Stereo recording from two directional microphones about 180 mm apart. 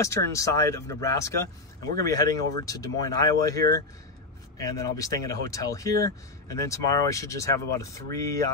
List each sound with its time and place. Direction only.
0.0 s speech: 15° left (ahead or behind)